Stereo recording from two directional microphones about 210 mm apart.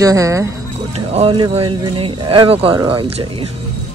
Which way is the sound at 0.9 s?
30° right (ahead or behind).